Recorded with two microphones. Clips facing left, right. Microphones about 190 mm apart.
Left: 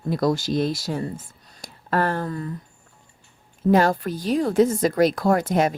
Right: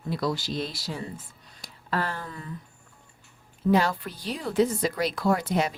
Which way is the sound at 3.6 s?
45° left (ahead or behind).